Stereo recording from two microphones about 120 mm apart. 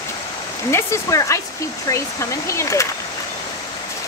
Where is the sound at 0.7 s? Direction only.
25° left (ahead or behind).